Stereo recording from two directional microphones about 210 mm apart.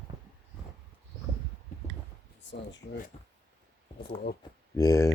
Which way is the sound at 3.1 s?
30° left (ahead or behind).